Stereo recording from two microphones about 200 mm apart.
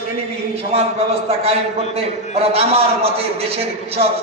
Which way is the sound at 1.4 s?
30° right (ahead or behind).